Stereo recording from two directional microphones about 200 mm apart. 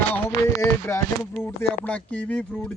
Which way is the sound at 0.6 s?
15° left (ahead or behind).